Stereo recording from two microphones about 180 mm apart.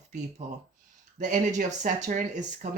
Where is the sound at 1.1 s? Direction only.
45° right (ahead or behind).